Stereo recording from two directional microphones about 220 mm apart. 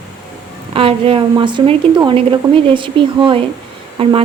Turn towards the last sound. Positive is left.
turn(degrees=-25)  # may be behind; listen again after turning